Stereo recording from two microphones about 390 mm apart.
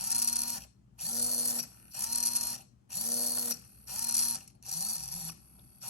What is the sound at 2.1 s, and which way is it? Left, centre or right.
Ratchet, centre.